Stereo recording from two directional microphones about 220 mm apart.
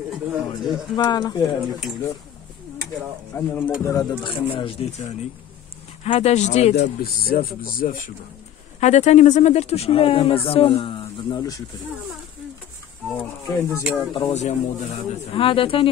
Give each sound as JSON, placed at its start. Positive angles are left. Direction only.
{"t": 0.3, "sound": "speech", "side_deg": -5}
{"t": 0.9, "sound": "speech", "side_deg": 20}
{"t": 3.3, "sound": "speech", "side_deg": 5}
{"t": 6.0, "sound": "speech", "side_deg": 30}
{"t": 6.8, "sound": "speech", "side_deg": 40}
{"t": 13.2, "sound": "speech", "side_deg": 10}
{"t": 13.7, "sound": "speech", "side_deg": -5}
{"t": 14.1, "sound": "speech", "side_deg": 25}